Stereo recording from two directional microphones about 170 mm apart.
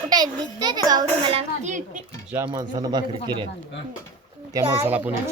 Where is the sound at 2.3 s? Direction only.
20° right (ahead or behind).